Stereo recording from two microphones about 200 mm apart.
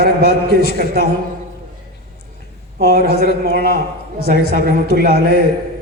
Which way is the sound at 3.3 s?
50° right (ahead or behind).